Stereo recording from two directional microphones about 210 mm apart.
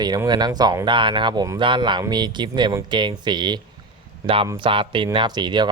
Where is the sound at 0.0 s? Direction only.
20° right (ahead or behind).